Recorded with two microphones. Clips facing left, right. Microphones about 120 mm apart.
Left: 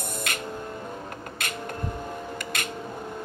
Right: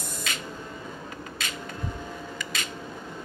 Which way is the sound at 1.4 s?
55° left (ahead or behind).